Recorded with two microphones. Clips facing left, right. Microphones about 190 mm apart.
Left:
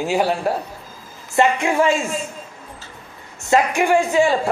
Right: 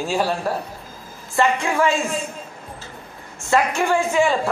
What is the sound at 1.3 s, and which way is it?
Speech, 20° left (ahead or behind).